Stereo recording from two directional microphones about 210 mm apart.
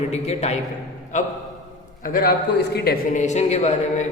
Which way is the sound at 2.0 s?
40° left (ahead or behind).